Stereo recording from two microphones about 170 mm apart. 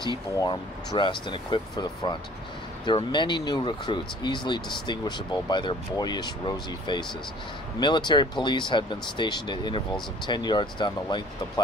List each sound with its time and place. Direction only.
0.4 s speech: 25° left (ahead or behind)